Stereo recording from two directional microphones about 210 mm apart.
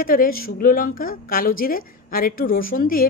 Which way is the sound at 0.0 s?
45° left (ahead or behind).